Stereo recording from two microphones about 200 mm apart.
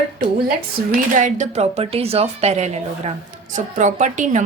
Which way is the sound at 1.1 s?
35° right (ahead or behind).